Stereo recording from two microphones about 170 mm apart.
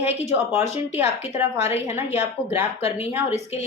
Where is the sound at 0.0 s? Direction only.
40° left (ahead or behind).